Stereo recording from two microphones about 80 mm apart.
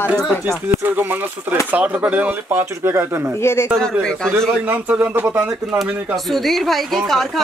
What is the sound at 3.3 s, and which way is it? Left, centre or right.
Speech, left.